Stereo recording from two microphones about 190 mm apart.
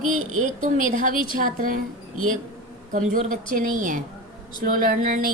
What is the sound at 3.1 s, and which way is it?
A woman's voice, 45° right (ahead or behind).